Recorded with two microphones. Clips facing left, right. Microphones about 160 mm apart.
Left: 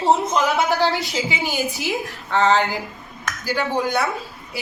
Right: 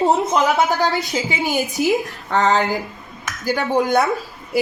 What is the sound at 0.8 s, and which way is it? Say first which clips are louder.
A woman's voice: right 1 dB; 45° right (ahead or behind).